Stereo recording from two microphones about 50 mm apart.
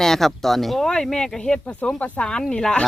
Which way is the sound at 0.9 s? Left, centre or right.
Centre.